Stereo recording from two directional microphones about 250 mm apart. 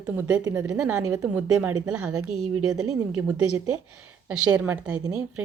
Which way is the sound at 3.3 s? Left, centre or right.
Right.